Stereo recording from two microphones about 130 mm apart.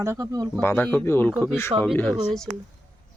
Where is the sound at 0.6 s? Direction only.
15° left (ahead or behind).